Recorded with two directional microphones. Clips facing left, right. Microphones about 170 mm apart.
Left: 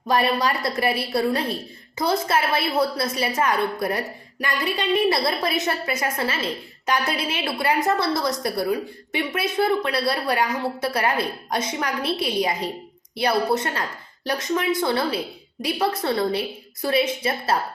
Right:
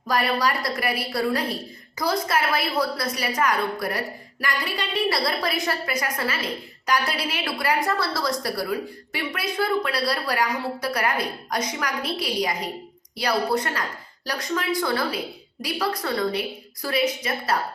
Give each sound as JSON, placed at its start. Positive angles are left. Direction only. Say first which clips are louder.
{"t": 0.1, "sound": "a woman's voice", "louder": "left 2 dB", "side_deg": 25}